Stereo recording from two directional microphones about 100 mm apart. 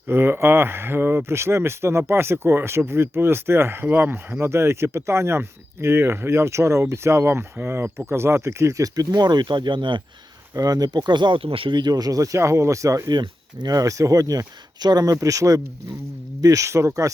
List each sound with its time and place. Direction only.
0.1 s speech: 25° right (ahead or behind); by 10.0 s 50° right (ahead or behind)
10.5 s speech: 35° right (ahead or behind)
13.1 s speech: 50° right (ahead or behind); by 17.1 s 30° right (ahead or behind)